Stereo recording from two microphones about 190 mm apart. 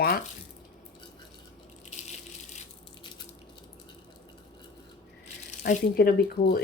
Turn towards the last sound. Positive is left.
turn(degrees=55)  # may be behind; listen again after turning